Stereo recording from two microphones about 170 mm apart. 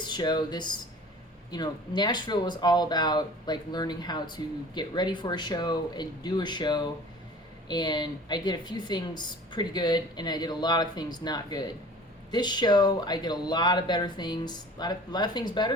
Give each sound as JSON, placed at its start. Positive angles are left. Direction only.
{"t": 0.0, "sound": "a woman's voice", "side_deg": 25}